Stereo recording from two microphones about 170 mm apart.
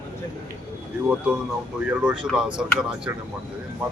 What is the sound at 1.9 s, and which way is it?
Speech, 5° right (ahead or behind).